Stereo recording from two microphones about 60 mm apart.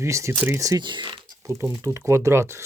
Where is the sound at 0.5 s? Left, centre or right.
Right.